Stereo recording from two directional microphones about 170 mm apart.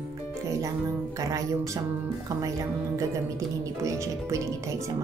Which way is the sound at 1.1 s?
20° right (ahead or behind).